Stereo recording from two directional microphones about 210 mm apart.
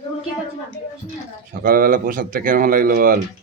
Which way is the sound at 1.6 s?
45° right (ahead or behind).